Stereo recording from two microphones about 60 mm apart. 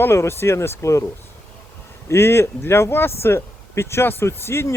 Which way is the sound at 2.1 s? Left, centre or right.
Left.